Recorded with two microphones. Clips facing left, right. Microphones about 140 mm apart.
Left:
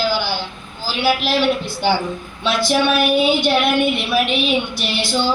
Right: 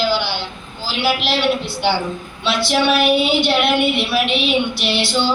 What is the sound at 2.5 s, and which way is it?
Speech, 45° left (ahead or behind).